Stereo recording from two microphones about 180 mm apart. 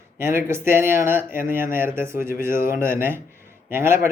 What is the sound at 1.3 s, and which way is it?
Speech, 50° left (ahead or behind).